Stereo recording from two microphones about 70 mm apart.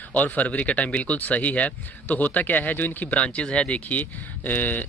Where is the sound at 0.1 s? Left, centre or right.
Left.